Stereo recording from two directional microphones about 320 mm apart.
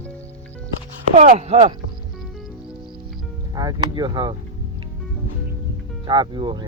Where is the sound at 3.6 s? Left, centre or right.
Centre.